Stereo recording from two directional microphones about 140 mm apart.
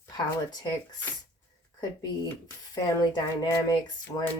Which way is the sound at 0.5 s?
30° left (ahead or behind).